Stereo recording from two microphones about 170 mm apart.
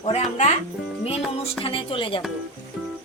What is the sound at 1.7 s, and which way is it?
Speech, 30° left (ahead or behind).